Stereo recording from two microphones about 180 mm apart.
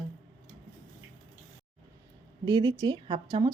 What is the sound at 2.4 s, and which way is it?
Speech, 25° right (ahead or behind).